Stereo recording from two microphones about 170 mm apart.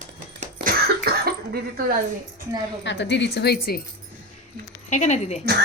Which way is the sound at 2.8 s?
90° left.